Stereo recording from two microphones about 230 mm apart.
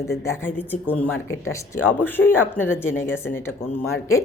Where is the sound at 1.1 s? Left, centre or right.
Left.